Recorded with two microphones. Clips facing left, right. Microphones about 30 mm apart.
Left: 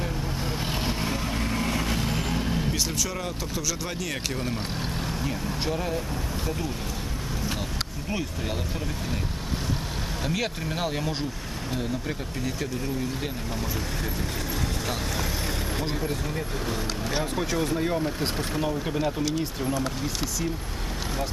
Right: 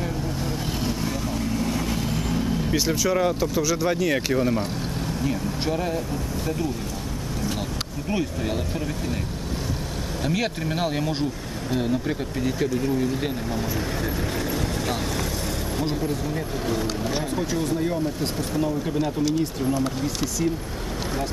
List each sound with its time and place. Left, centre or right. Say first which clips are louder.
0.8 s vehicle: right 2 dB; left
1.7 s vehicle: right 1 dB; centre
2.7 s speech: right 7 dB; centre
8.1 s speech: right 6 dB; centre
10.2 s speech: right 4 dB; centre
17.4 s speech: right 1 dB; centre
18.9 s speech: right 5 dB; centre